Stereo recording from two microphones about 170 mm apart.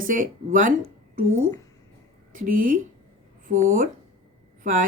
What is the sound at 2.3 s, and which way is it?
Speech, 55° right (ahead or behind).